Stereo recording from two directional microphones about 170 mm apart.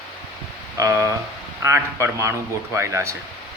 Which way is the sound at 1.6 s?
15° right (ahead or behind).